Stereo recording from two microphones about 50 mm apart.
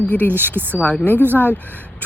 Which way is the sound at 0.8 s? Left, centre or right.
Left.